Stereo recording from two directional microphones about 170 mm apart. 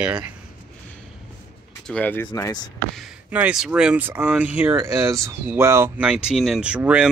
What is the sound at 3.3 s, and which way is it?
Speech, 5° right (ahead or behind).